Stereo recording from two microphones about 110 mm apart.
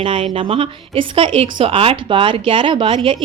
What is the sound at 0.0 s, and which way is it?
A woman's voice, 60° right (ahead or behind).